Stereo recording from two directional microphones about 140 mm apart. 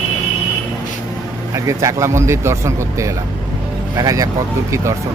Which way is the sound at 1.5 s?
20° right (ahead or behind).